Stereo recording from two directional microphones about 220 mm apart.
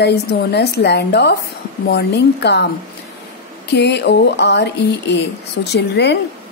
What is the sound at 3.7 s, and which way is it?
Speech, 50° left (ahead or behind).